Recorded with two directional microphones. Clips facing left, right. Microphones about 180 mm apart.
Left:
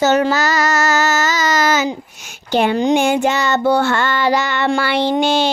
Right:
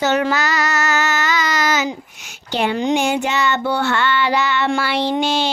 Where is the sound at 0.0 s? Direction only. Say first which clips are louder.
Left 3 dB; 40° left (ahead or behind).